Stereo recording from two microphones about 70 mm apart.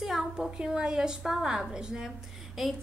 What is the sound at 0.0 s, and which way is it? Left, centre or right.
A woman's voice, centre.